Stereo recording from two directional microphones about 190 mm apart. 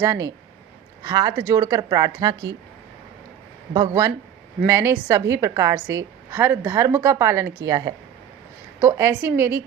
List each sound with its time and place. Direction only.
0.0 s a woman's voice: 15° right (ahead or behind)
3.8 s a woman's voice: 15° right (ahead or behind)